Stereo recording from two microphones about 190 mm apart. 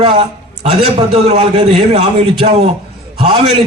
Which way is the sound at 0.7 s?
35° right (ahead or behind).